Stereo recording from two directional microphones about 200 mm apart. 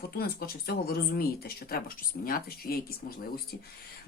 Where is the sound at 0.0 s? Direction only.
50° left (ahead or behind).